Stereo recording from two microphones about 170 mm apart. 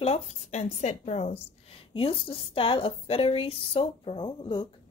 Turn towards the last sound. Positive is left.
turn(degrees=30)  # may be behind; listen again after turning